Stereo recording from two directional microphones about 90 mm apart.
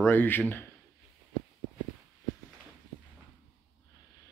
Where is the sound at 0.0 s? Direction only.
20° left (ahead or behind).